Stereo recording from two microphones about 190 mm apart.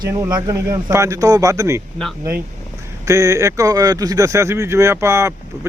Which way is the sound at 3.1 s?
15° right (ahead or behind).